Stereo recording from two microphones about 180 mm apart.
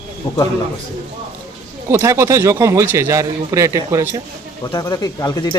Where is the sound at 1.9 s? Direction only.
15° right (ahead or behind).